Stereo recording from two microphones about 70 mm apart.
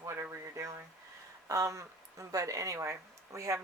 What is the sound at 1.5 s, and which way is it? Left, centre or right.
Speech, right.